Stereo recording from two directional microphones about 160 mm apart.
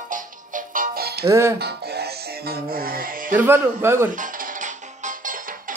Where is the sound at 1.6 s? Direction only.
80° right.